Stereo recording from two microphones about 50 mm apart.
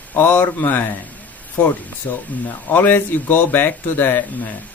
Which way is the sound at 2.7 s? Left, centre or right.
Left.